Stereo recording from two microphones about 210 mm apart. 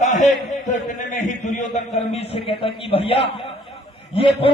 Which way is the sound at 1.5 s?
30° left (ahead or behind).